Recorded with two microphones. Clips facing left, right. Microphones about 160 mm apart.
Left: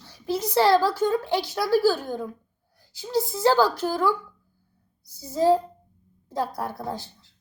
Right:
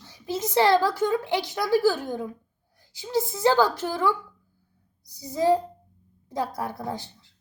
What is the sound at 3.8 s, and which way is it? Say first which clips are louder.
Speech: left 2 dB; 40° left (ahead or behind).